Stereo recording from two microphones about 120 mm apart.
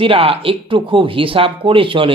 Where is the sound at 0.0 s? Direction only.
50° right (ahead or behind).